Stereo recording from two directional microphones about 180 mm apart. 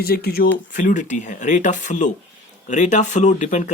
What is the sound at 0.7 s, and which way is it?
Speech, 50° left (ahead or behind).